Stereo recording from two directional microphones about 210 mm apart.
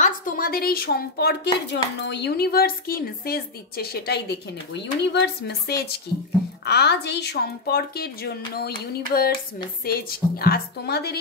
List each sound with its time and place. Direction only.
0.0 s a woman's voice: 40° left (ahead or behind)